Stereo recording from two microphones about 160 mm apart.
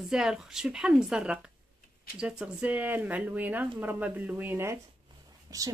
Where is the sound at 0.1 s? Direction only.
5° right (ahead or behind).